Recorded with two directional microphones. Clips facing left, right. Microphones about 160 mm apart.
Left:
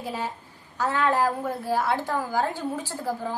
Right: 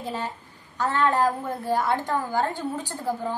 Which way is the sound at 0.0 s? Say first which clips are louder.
Even; 10° left (ahead or behind).